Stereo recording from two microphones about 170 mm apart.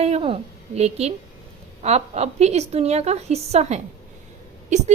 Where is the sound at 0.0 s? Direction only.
35° right (ahead or behind).